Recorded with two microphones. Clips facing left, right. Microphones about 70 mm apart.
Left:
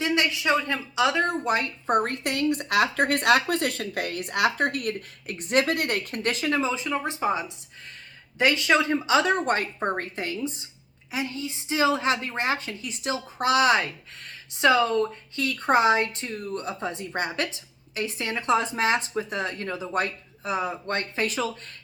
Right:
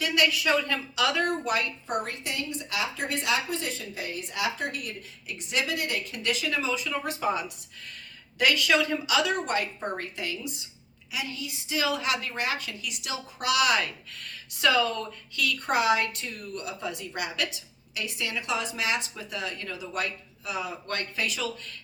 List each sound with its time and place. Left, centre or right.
0.0 s a woman's voice: left